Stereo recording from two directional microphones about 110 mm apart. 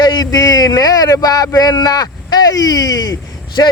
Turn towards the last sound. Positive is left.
turn(degrees=40)  # may be behind; listen again after turning